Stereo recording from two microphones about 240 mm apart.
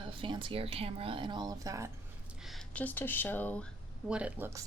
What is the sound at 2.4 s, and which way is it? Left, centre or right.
Speech, centre.